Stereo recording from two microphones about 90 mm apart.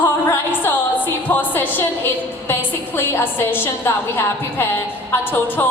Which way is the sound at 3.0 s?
25° left (ahead or behind).